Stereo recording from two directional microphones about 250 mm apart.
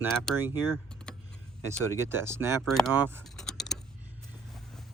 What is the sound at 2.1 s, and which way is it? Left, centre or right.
Speech, centre.